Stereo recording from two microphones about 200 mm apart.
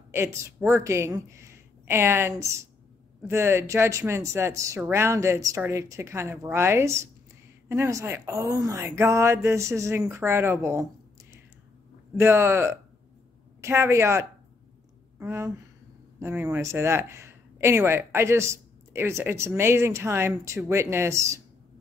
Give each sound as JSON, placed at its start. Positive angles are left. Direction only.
{"t": 0.1, "sound": "speech", "side_deg": -15}
{"t": 12.2, "sound": "speech", "side_deg": -10}